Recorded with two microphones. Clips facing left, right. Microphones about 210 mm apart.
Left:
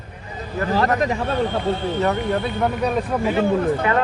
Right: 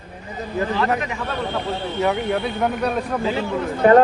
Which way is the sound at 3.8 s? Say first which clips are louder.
Right 9 dB; 45° right (ahead or behind).